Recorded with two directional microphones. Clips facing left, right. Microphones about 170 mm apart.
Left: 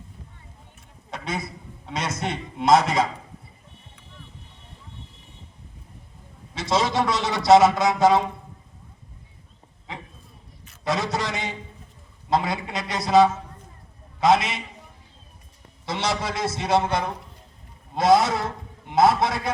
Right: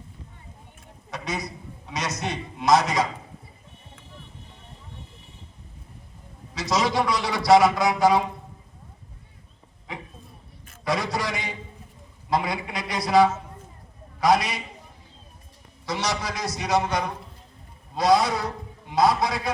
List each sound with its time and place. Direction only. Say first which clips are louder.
1.1 s a man's voice: even; 25° left (ahead or behind)
6.5 s a man's voice: left 1 dB; 25° left (ahead or behind)
10.8 s a sound: left 1 dB; 20° left (ahead or behind)
12.5 s a man's voice: left 1 dB; 25° left (ahead or behind)
15.9 s a man's voice: left 2 dB; 25° left (ahead or behind)
18.0 s a man's voice: left 2 dB; 25° left (ahead or behind)